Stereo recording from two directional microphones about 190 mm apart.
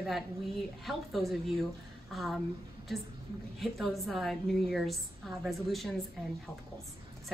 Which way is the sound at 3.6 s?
Centre (ahead or behind).